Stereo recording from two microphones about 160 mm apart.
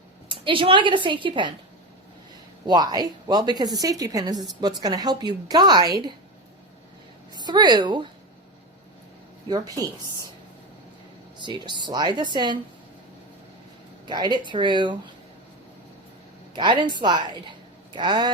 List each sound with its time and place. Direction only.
0.3 s a woman's voice: 35° right (ahead or behind)
2.6 s a woman's voice: 25° right (ahead or behind)
7.3 s a woman's voice: 25° right (ahead or behind)
9.5 s a woman's voice: 25° right (ahead or behind)
11.3 s a woman's voice: 30° right (ahead or behind)
14.1 s a woman's voice: 25° right (ahead or behind)
16.6 s a woman's voice: 30° right (ahead or behind)